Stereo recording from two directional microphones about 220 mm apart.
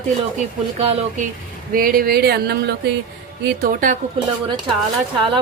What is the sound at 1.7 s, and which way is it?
Speech, 40° right (ahead or behind).